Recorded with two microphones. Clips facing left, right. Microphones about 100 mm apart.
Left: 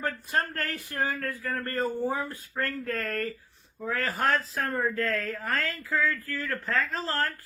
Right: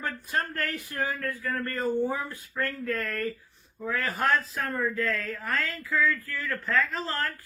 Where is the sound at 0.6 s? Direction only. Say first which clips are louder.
Even; 35° left (ahead or behind).